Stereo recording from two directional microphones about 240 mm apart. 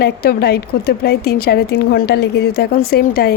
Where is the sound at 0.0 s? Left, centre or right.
Left.